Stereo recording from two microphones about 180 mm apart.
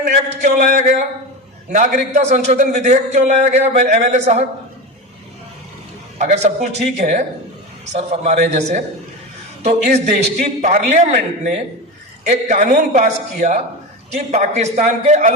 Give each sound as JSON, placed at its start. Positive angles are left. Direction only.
{"t": 0.1, "sound": "a man's voice", "side_deg": -45}
{"t": 6.1, "sound": "a man's voice", "side_deg": -40}